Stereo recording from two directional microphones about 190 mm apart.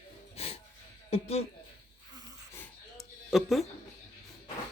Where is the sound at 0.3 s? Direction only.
30° left (ahead or behind).